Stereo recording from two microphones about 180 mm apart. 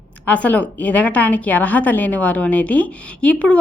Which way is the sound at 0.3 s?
10° left (ahead or behind).